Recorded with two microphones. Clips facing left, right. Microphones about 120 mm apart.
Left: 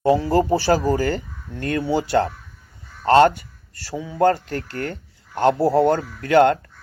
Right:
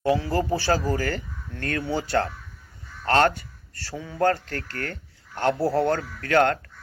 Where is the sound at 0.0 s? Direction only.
35° left (ahead or behind).